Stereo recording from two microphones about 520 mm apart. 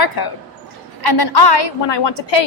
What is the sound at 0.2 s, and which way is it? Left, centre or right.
A woman's voice, left.